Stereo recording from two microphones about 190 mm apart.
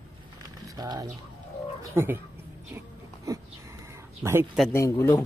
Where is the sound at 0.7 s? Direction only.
20° right (ahead or behind).